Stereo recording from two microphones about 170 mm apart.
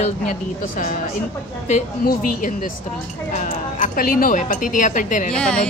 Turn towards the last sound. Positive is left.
turn(degrees=5)  # may be behind; listen again after turning